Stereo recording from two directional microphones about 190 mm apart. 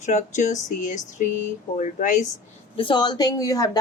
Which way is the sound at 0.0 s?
40° left (ahead or behind).